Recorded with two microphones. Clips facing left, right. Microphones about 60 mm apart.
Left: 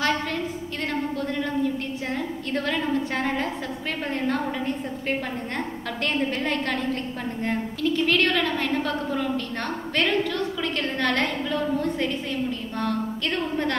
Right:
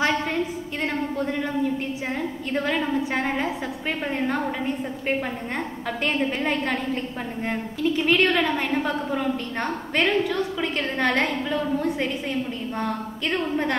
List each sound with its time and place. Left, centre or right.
1.1 s a sound: centre
2.1 s a woman's voice: centre
12.7 s a woman's voice: centre